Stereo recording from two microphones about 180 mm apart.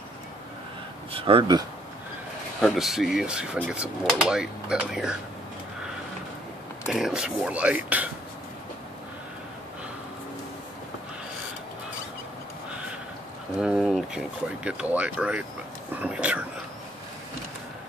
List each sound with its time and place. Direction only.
1.1 s speech: 30° right (ahead or behind)
2.6 s speech: centre (ahead or behind)
6.9 s speech: 5° right (ahead or behind)
13.6 s speech: 5° right (ahead or behind)